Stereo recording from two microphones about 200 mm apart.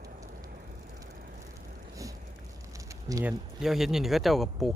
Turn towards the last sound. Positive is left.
turn(degrees=0)  # may be behind; listen again after turning